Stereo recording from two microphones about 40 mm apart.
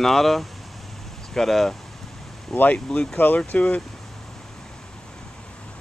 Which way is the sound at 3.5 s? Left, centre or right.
Left.